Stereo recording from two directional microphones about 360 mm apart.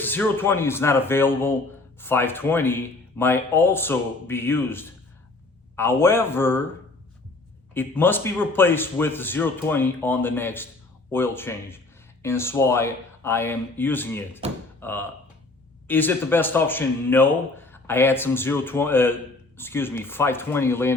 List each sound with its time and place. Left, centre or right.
0.0 s speech: centre
7.7 s speech: centre